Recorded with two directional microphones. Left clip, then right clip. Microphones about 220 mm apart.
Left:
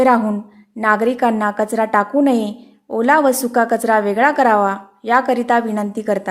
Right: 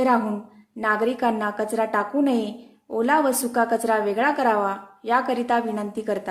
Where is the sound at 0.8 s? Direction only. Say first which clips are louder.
Left 7 dB; 35° left (ahead or behind).